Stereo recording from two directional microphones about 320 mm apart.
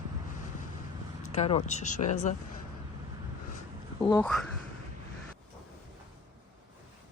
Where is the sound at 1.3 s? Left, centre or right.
Centre.